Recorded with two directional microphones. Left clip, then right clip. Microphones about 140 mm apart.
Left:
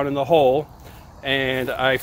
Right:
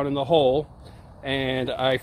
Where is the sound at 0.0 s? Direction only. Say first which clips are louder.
Left 3 dB; 5° right (ahead or behind).